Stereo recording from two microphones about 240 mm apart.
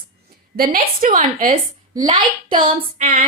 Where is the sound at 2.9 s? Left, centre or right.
Right.